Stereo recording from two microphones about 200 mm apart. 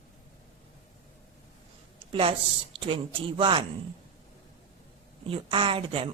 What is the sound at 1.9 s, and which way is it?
A woman's voice, 30° right (ahead or behind).